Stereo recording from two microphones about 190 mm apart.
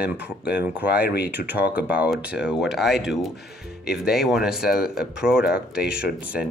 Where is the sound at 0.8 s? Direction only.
55° left (ahead or behind).